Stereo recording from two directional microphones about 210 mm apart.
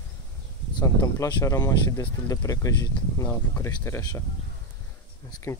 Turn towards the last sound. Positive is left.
turn(degrees=20)  # may be behind; listen again after turning